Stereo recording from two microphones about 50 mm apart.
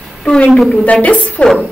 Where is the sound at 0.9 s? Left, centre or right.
Left.